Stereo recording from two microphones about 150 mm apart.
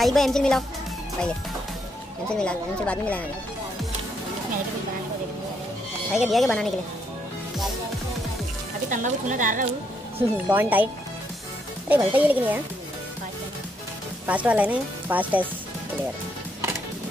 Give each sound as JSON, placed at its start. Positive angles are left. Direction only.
{"t": 0.0, "sound": "speech", "side_deg": 0}
{"t": 2.4, "sound": "speech", "side_deg": 10}
{"t": 6.1, "sound": "speech", "side_deg": 0}
{"t": 8.8, "sound": "speech", "side_deg": -55}
{"t": 10.3, "sound": "speech", "side_deg": -10}
{"t": 11.9, "sound": "speech", "side_deg": -10}
{"t": 14.2, "sound": "speech", "side_deg": -10}